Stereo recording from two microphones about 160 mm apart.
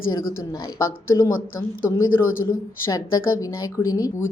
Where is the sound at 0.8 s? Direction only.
20° left (ahead or behind).